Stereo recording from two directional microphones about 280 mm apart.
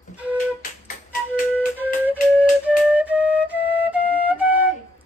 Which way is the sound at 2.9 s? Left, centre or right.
Centre.